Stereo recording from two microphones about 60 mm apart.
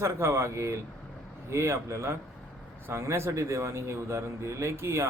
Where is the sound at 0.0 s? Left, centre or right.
Right.